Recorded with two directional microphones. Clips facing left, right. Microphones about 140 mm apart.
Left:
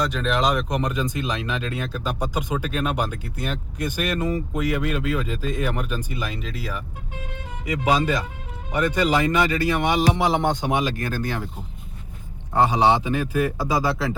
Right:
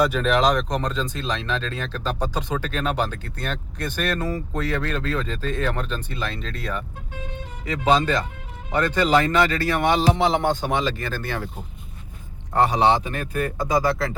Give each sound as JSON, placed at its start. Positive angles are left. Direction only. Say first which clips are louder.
{"t": 0.0, "sound": "speech", "louder": "right 3 dB", "side_deg": -5}
{"t": 7.9, "sound": "speech", "louder": "right 1 dB", "side_deg": 10}
{"t": 12.5, "sound": "a man's voice", "louder": "even", "side_deg": 5}